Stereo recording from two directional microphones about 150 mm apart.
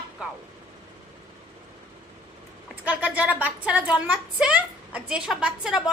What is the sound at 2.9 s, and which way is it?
A woman's voice, 10° right (ahead or behind).